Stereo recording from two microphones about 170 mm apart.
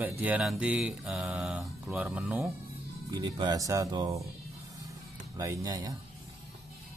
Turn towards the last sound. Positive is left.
turn(degrees=-20)  # may be behind; listen again after turning